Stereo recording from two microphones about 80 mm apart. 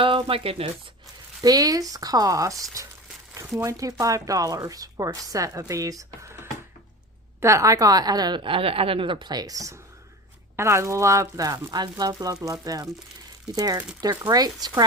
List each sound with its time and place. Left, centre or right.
0.0 s a sound: right
1.4 s speech: right
7.4 s speech: right
8.4 s speech: right
10.6 s speech: right
11.7 s speech: right
14.0 s speech: right